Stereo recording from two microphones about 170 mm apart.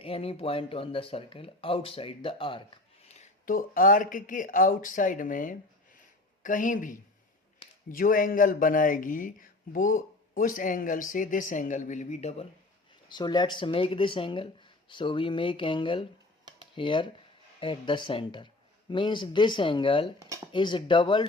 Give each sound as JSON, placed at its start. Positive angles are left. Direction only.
{"t": 0.0, "sound": "speech", "side_deg": 35}
{"t": 3.4, "sound": "speech", "side_deg": 55}
{"t": 13.1, "sound": "speech", "side_deg": 25}